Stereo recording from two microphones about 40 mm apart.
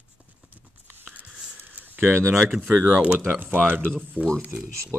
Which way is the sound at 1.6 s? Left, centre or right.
Right.